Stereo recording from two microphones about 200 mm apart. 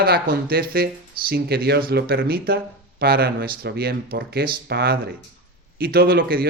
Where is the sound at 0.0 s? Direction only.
50° right (ahead or behind).